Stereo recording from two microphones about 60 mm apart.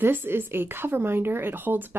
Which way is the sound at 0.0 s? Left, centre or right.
Right.